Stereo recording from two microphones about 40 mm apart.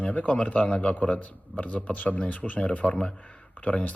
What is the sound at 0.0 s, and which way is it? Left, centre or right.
Speech, left.